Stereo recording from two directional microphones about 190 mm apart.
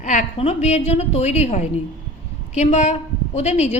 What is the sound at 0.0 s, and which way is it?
A woman's voice, 40° left (ahead or behind).